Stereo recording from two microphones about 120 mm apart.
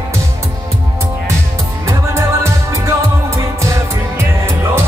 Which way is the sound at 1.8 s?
25° right (ahead or behind).